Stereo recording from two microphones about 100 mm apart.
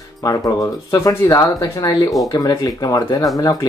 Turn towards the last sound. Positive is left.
turn(degrees=40)  # may be behind; listen again after turning